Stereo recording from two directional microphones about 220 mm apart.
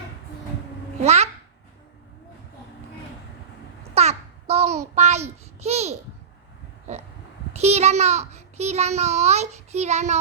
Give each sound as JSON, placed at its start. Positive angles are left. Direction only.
{"t": 1.0, "sound": "babbling", "side_deg": -30}
{"t": 3.9, "sound": "a sound", "side_deg": -30}
{"t": 4.9, "sound": "a child's voice", "side_deg": -30}
{"t": 7.5, "sound": "a child's voice", "side_deg": -30}